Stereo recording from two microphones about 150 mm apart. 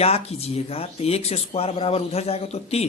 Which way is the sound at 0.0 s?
40° left (ahead or behind).